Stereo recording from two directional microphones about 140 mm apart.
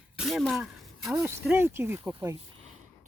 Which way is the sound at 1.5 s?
15° right (ahead or behind).